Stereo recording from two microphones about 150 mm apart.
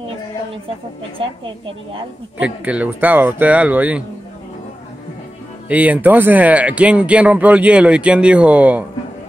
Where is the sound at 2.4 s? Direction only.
10° right (ahead or behind).